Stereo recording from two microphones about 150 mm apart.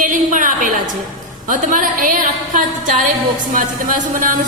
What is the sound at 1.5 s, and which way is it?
A woman's voice, 60° right (ahead or behind).